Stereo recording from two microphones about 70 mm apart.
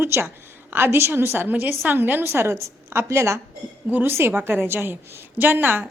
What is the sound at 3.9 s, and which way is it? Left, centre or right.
A woman's voice, right.